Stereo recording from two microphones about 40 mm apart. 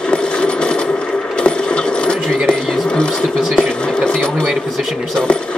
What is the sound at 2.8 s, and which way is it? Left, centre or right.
Sewing machine, left.